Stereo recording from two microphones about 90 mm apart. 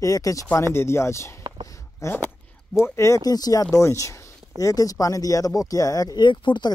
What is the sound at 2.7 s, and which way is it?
Speech, 30° left (ahead or behind).